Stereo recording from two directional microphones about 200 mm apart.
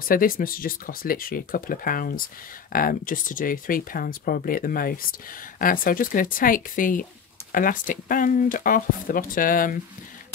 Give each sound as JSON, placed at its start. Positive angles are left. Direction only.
{"t": 0.0, "sound": "speech", "side_deg": 45}